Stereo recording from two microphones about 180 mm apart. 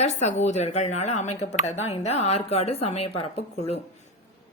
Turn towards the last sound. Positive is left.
turn(degrees=35)  # may be behind; listen again after turning